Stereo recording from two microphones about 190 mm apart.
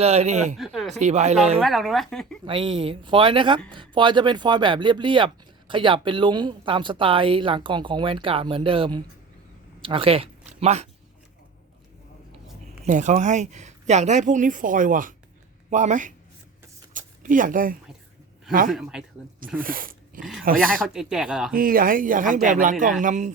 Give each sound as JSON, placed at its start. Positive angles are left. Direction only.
{"t": 0.0, "sound": "speech", "side_deg": -35}
{"t": 0.5, "sound": "speech", "side_deg": 0}
{"t": 0.9, "sound": "speech", "side_deg": -35}
{"t": 1.6, "sound": "speech", "side_deg": 0}
{"t": 2.5, "sound": "speech", "side_deg": -30}
{"t": 12.8, "sound": "speech", "side_deg": -40}
{"t": 16.9, "sound": "a sound", "side_deg": -45}
{"t": 18.7, "sound": "speech", "side_deg": 0}
{"t": 19.5, "sound": "speech", "side_deg": -50}
{"t": 20.8, "sound": "speech", "side_deg": 0}
{"t": 21.5, "sound": "speech", "side_deg": -50}